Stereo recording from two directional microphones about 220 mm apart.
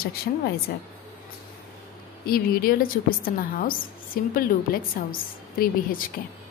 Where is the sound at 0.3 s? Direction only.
40° left (ahead or behind).